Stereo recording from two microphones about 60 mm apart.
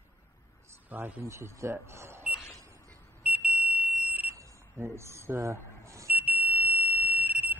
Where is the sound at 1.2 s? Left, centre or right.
Right.